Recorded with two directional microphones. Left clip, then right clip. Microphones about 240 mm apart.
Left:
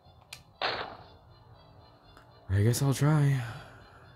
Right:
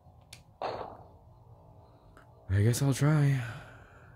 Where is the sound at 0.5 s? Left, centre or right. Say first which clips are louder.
Left 4 dB; left.